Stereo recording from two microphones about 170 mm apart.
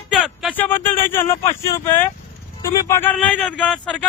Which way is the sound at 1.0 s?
15° left (ahead or behind).